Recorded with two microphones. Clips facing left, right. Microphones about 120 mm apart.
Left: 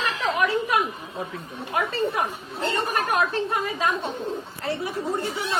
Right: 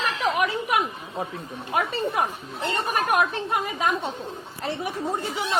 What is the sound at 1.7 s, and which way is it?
Speech, 20° right (ahead or behind).